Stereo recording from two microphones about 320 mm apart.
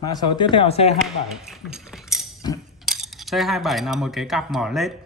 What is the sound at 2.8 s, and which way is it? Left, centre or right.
Speech, centre.